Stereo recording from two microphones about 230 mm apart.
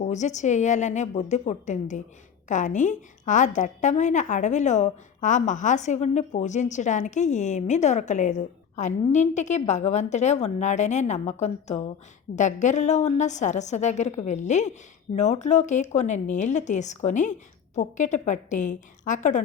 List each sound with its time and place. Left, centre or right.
0.0 s a woman's voice: left